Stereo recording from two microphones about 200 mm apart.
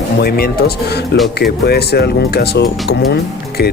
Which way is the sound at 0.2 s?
50° left (ahead or behind).